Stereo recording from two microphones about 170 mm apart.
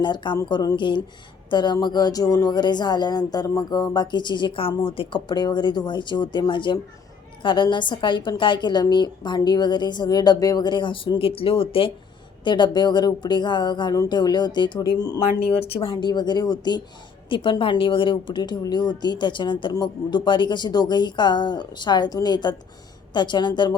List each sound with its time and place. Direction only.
0.0 s a woman's voice: 25° left (ahead or behind)